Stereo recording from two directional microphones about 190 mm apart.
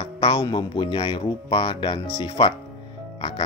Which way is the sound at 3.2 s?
25° left (ahead or behind).